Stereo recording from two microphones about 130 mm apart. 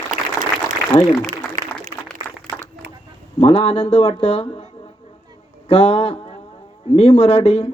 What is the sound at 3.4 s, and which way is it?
Speech, 50° left (ahead or behind).